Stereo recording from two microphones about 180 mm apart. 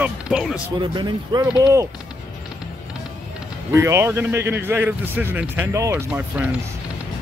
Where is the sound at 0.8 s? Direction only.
25° right (ahead or behind).